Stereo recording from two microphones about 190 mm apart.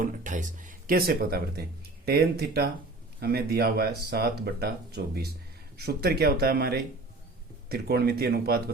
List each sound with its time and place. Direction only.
0.0 s speech: 45° right (ahead or behind)